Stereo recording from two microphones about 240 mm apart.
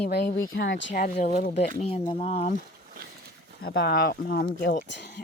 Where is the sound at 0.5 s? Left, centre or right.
Left.